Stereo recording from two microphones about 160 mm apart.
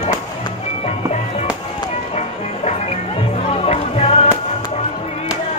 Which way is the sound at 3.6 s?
40° left (ahead or behind).